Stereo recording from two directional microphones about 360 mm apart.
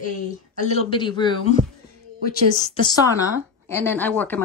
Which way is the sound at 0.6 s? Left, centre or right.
Centre.